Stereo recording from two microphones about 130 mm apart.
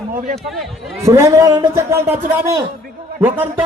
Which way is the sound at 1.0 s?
25° right (ahead or behind).